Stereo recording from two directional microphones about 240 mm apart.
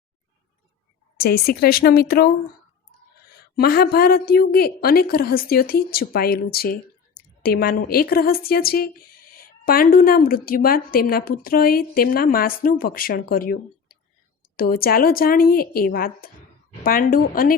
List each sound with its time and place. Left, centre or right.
1.1 s a woman's voice: left
3.6 s a woman's voice: left